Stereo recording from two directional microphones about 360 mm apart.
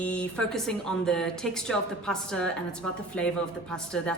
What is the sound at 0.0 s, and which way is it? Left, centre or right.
Speech, centre.